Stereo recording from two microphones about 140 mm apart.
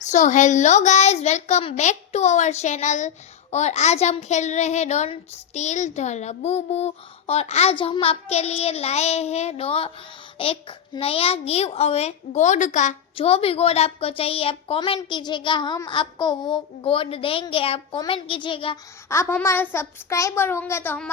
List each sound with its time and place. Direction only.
0.1 s a child's voice: 60° left (ahead or behind)
13.1 s speech: 45° left (ahead or behind)
14.8 s child singing: 30° left (ahead or behind)
19.0 s a child's voice: 20° left (ahead or behind)